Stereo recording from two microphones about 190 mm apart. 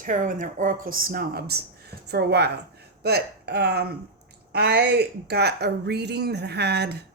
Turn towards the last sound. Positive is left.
turn(degrees=-60)  # may be behind; listen again after turning